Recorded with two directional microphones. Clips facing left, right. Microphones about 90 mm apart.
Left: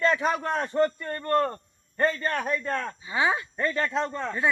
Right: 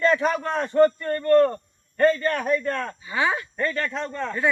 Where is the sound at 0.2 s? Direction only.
20° left (ahead or behind).